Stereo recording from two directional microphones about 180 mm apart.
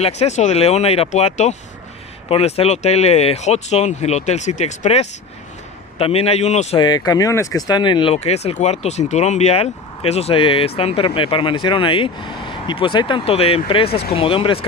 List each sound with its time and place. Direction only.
0.0 s speech: 40° left (ahead or behind)
6.8 s speech: 20° left (ahead or behind)